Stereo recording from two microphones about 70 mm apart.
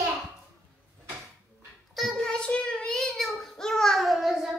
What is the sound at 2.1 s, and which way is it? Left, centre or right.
Child singing, centre.